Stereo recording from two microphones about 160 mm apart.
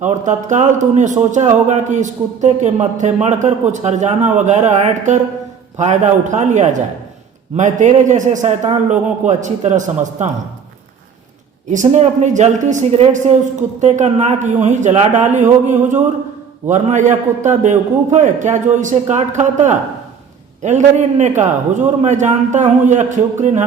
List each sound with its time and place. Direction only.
0.0 s speech: 50° right (ahead or behind)
11.7 s speech: 50° right (ahead or behind)